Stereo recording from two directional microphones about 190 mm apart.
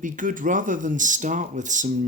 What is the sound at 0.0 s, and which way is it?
Speech, 45° right (ahead or behind).